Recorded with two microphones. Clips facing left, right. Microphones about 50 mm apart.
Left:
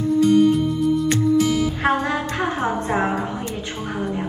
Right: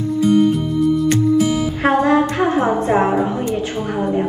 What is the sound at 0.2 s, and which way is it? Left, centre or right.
Music, centre.